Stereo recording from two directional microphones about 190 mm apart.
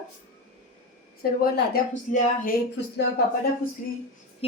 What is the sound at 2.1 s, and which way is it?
Speech, 40° left (ahead or behind).